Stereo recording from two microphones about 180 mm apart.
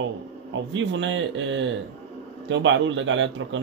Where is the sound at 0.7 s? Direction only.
90° right.